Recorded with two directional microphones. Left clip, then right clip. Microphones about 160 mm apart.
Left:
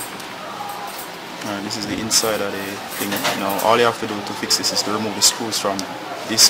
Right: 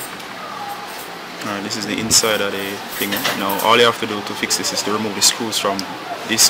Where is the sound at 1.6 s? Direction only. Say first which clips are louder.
Right 2 dB; 10° right (ahead or behind).